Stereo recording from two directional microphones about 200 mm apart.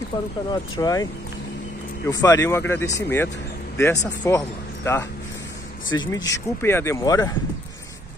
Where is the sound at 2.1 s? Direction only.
15° left (ahead or behind).